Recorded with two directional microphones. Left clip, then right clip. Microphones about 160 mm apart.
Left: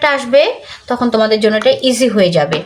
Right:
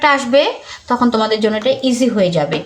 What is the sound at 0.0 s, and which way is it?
Speech, 10° left (ahead or behind).